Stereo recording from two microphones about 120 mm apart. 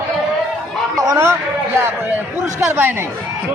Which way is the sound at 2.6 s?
20° right (ahead or behind).